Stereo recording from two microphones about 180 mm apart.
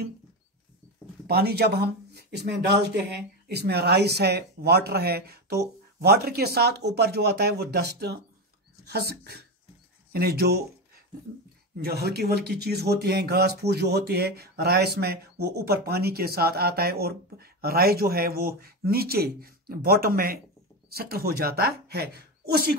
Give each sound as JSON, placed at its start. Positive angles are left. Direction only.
{"t": 1.2, "sound": "speech", "side_deg": -60}
{"t": 11.7, "sound": "speech", "side_deg": -60}